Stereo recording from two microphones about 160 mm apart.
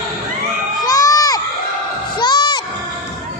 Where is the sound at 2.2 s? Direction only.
25° left (ahead or behind).